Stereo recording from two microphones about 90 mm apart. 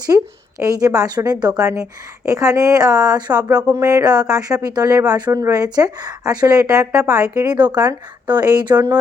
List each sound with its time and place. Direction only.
0.1 s a woman's voice: 30° right (ahead or behind)
0.6 s a woman's voice: 40° right (ahead or behind)